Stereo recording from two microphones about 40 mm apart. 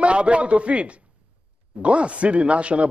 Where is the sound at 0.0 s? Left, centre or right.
Right.